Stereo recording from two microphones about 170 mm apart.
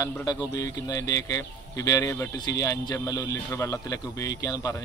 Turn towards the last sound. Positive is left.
turn(degrees=20)  # may be behind; listen again after turning